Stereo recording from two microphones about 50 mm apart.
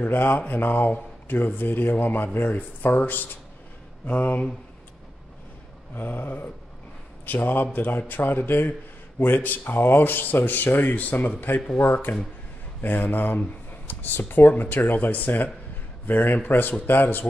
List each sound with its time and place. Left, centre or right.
0.0 s speech: left
5.9 s speech: left